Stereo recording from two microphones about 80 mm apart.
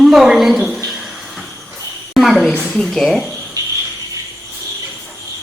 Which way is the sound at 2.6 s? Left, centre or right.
Centre.